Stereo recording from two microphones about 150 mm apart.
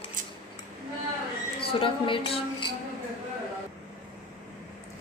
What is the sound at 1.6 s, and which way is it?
A woman's voice, 35° left (ahead or behind).